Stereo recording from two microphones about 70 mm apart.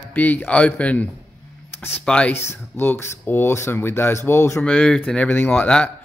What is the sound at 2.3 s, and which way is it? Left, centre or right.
Speech, left.